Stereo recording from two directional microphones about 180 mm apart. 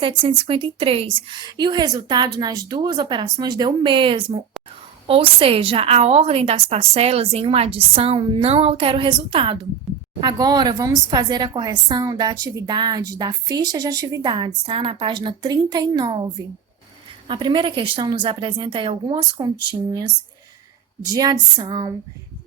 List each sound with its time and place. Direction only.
0.0 s a woman's voice: 30° right (ahead or behind)
17.2 s a woman's voice: 25° right (ahead or behind)
21.0 s a woman's voice: 20° right (ahead or behind)